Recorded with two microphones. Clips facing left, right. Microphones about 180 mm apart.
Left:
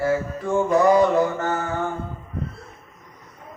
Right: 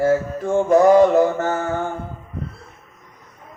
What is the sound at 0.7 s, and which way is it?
Music, 45° right (ahead or behind).